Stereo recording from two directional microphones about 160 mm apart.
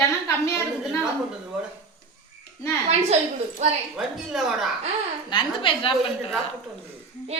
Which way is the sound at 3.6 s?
45° right (ahead or behind).